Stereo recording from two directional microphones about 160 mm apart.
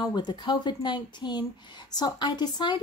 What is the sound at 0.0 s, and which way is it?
A woman's voice, 25° left (ahead or behind).